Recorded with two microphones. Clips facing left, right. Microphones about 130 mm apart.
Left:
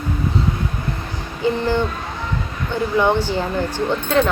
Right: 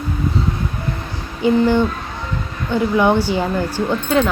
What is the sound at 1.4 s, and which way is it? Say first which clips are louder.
Speech: right 5 dB; 15° right (ahead or behind).